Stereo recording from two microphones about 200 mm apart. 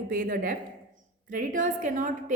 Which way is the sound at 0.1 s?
45° right (ahead or behind).